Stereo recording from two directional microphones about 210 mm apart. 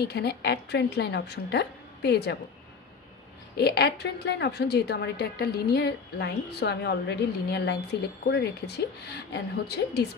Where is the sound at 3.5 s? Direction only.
50° left (ahead or behind).